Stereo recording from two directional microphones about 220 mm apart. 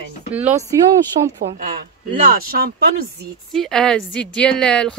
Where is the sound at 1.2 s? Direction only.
30° right (ahead or behind).